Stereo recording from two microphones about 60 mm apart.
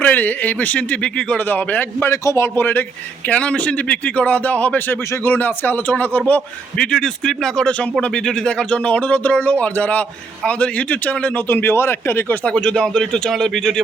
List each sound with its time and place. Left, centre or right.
0.0 s speech: left
1.5 s a man's voice: left
2.2 s a man's voice: left
2.6 s a man's voice: left
3.2 s speech: left
12.5 s speech: centre